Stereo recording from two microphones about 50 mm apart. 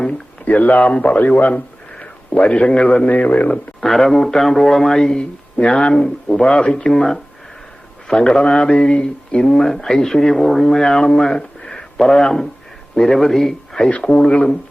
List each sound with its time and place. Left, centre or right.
0.1 s a man's voice: left
3.8 s speech: centre
8.7 s a man's voice: left
14.3 s speech: left